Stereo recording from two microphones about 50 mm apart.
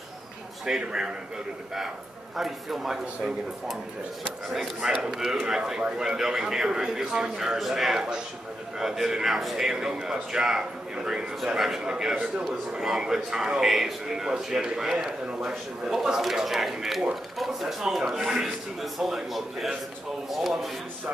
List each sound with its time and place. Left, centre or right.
0.7 s a man's voice: centre
2.3 s a man's voice: centre
12.8 s a man's voice: centre